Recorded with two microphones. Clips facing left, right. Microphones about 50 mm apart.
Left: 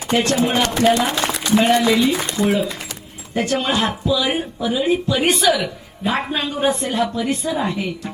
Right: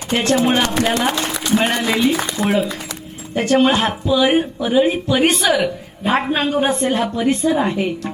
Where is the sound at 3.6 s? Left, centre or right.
Right.